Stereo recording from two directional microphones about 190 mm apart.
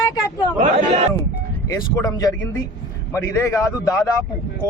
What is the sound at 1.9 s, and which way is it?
A man's voice, 20° left (ahead or behind).